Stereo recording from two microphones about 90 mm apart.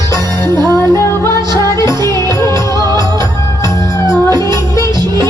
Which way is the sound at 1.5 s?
40° left (ahead or behind).